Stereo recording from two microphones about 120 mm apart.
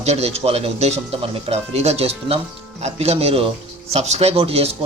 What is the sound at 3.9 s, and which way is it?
Speech, 70° right (ahead or behind).